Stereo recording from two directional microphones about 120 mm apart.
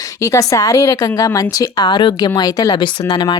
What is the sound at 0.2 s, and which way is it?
A woman's voice, 25° left (ahead or behind).